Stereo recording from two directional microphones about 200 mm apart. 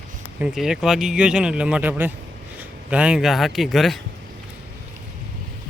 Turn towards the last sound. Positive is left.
turn(degrees=0)  # may be behind; listen again after turning